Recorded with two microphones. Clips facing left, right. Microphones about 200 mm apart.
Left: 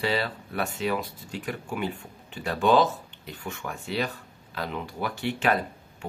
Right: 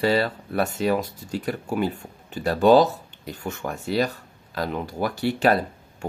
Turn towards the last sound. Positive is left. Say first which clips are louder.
# right 5 dB
turn(degrees=-40)  # may be behind; listen again after turning